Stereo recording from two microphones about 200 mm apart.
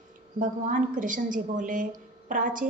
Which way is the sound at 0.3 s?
40° right (ahead or behind).